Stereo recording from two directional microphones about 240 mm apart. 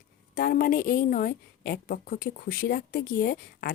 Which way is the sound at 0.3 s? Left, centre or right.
Left.